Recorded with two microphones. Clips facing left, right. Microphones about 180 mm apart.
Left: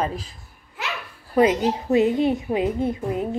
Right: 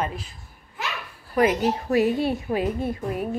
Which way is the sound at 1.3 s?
20° left (ahead or behind).